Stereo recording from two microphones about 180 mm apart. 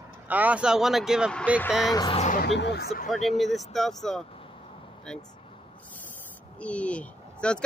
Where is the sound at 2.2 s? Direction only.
45° left (ahead or behind).